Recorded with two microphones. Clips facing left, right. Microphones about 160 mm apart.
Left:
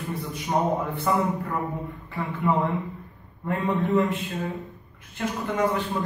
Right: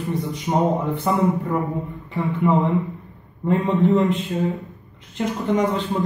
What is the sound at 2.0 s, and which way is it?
Speech, 20° right (ahead or behind).